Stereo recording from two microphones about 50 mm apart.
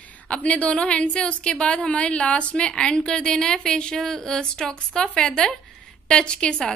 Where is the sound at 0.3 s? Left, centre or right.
Left.